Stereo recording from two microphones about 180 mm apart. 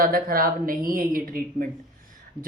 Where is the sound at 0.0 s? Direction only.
55° right (ahead or behind).